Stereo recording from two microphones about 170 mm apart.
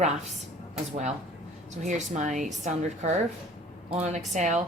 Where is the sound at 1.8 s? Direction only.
45° right (ahead or behind).